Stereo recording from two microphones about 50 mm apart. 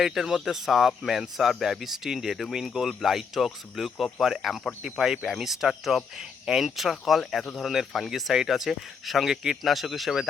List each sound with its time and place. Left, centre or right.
0.0 s speech: centre